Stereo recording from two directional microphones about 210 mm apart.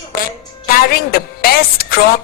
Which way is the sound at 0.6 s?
45° left (ahead or behind).